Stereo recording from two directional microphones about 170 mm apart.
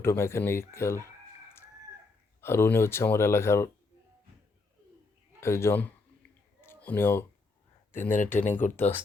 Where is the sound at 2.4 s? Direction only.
15° left (ahead or behind).